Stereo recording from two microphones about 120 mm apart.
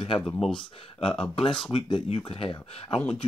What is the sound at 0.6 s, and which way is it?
Speech, 50° left (ahead or behind).